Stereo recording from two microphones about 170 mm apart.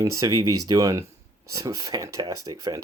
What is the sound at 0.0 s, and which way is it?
Speech, 20° right (ahead or behind).